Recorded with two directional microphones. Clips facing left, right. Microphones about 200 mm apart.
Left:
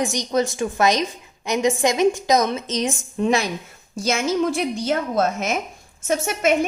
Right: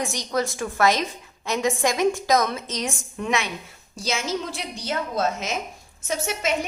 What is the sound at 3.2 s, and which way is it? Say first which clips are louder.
Speech: left 6 dB; 35° left (ahead or behind).